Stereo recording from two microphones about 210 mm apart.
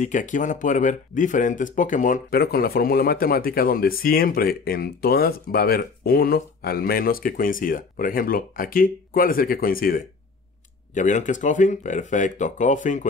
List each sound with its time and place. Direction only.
0.0 s speech: 35° left (ahead or behind)